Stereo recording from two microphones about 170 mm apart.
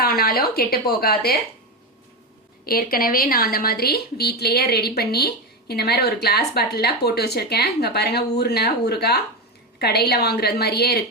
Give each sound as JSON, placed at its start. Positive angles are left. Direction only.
{"t": 0.0, "sound": "speech", "side_deg": 60}
{"t": 2.6, "sound": "a woman's voice", "side_deg": 60}